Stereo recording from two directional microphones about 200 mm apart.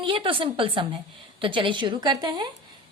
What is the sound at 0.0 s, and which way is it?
Speech, 25° right (ahead or behind).